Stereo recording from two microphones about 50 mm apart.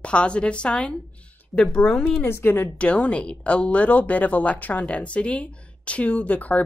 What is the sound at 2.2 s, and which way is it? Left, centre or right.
Speech, left.